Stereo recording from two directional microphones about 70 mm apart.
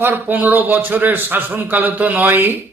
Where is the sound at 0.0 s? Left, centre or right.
Right.